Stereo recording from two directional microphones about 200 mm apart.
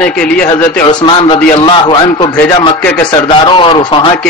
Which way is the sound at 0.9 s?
25° left (ahead or behind).